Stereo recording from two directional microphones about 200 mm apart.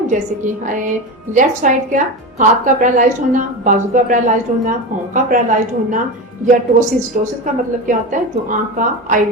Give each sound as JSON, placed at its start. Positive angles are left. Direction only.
{"t": 0.1, "sound": "a woman's voice", "side_deg": -40}